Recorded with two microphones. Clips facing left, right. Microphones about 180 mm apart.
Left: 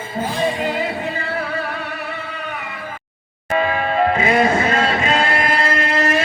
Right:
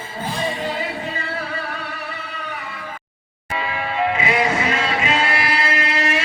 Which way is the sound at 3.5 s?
45° left (ahead or behind).